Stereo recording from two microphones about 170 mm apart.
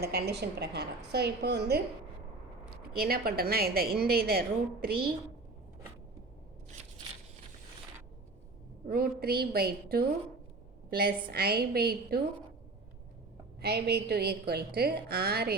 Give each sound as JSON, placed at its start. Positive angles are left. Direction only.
{"t": 0.0, "sound": "a woman's voice", "side_deg": -70}
{"t": 3.0, "sound": "a woman's voice", "side_deg": -60}
{"t": 8.9, "sound": "a woman's voice", "side_deg": -65}
{"t": 13.6, "sound": "a woman's voice", "side_deg": -75}